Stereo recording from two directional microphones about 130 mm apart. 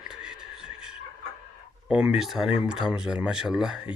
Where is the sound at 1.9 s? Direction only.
10° right (ahead or behind).